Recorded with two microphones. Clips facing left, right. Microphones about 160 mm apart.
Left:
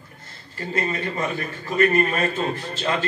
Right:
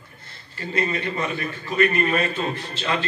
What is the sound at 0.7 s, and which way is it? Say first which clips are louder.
A man's voice: right 1 dB; 45° left (ahead or behind).